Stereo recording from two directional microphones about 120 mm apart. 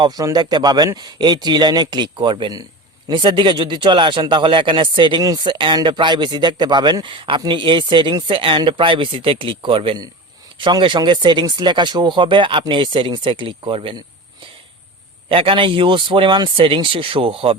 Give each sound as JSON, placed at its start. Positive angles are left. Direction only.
{"t": 0.0, "sound": "speech", "side_deg": -30}
{"t": 15.3, "sound": "speech", "side_deg": -50}